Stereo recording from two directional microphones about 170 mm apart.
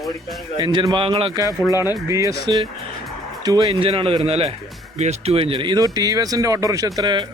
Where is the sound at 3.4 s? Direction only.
25° right (ahead or behind).